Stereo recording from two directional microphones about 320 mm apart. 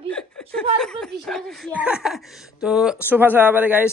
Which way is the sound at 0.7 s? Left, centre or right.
Centre.